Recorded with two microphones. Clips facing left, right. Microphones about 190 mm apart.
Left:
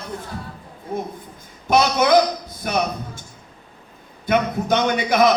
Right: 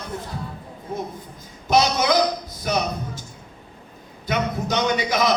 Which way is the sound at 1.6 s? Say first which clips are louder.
Left 2 dB; 55° left (ahead or behind).